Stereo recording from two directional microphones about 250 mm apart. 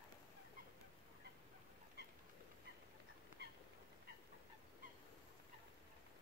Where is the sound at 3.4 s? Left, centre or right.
Right.